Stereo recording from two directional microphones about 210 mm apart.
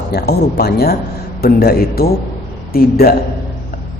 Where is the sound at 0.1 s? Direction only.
50° left (ahead or behind).